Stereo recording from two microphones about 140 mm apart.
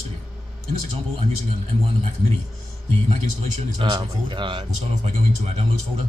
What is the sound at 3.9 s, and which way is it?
Speech, 30° right (ahead or behind).